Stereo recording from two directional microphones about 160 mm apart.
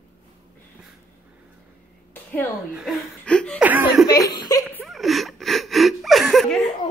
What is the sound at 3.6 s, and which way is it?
Speech, 10° right (ahead or behind).